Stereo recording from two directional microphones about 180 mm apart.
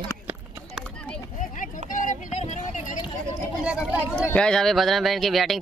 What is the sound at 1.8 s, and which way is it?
Vehicle, 45° left (ahead or behind).